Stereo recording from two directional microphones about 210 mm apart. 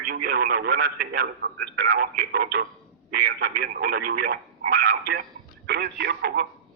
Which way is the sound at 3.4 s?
45° right (ahead or behind).